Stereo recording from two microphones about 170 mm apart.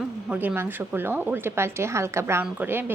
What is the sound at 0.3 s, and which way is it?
A woman's voice, 10° right (ahead or behind).